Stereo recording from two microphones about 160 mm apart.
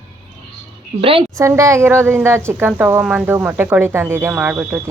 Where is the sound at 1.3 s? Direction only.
20° right (ahead or behind).